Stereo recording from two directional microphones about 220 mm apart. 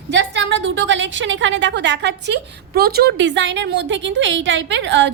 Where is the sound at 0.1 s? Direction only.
55° right (ahead or behind).